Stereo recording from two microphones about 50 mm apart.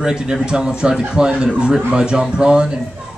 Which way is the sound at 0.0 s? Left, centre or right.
Centre.